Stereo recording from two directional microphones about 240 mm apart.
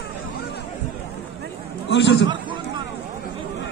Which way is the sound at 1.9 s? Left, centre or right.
Left.